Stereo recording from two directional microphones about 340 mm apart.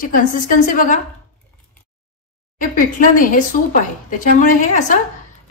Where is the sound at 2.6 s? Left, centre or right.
Left.